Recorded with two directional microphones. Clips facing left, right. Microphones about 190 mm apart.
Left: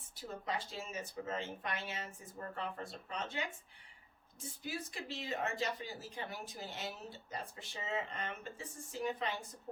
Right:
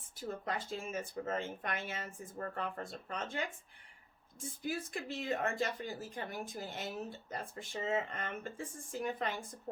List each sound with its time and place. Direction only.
0.2 s speech: 50° right (ahead or behind)